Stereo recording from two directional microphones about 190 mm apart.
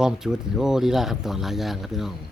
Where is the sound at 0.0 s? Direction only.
5° right (ahead or behind).